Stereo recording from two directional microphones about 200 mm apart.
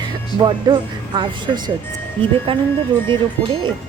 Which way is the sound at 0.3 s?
20° right (ahead or behind).